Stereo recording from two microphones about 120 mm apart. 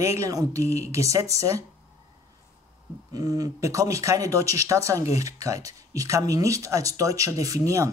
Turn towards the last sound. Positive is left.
turn(degrees=-25)  # may be behind; listen again after turning